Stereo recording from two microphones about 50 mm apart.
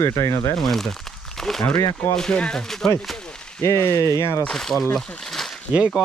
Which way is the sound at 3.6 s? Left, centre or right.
Left.